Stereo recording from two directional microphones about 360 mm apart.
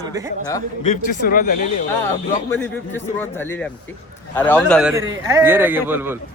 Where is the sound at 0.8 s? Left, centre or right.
Left.